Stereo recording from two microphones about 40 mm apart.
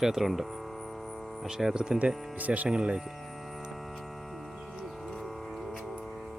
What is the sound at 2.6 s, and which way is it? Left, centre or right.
Speech, right.